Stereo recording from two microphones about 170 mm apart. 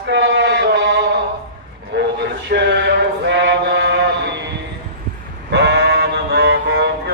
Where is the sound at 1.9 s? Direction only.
75° right (ahead or behind).